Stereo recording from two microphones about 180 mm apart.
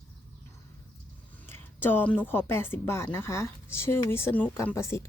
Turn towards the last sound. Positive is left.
turn(degrees=15)  # may be behind; listen again after turning